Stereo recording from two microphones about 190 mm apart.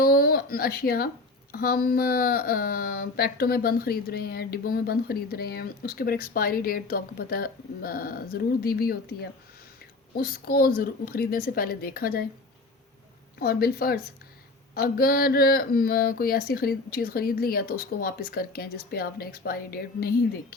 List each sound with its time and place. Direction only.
0.0 s speech: 50° left (ahead or behind)
13.4 s speech: 55° left (ahead or behind)